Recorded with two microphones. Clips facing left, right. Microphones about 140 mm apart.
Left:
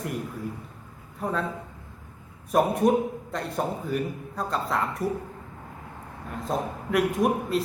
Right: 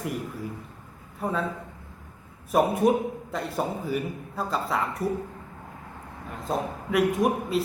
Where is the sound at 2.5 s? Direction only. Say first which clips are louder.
Even; centre (ahead or behind).